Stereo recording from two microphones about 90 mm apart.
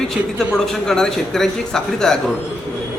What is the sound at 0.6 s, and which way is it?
A man's voice, 5° left (ahead or behind).